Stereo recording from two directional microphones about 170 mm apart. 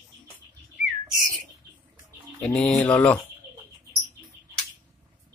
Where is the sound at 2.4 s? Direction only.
5° left (ahead or behind).